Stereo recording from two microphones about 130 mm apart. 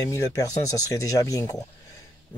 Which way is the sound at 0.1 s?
25° left (ahead or behind).